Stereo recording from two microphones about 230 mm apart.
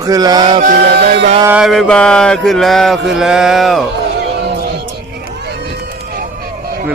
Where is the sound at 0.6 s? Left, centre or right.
Right.